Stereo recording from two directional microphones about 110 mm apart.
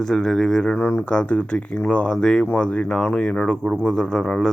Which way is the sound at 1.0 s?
10° left (ahead or behind).